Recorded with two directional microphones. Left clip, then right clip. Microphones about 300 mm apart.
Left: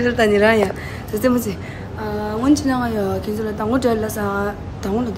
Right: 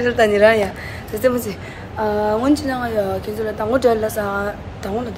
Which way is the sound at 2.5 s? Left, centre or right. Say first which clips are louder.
Even; centre.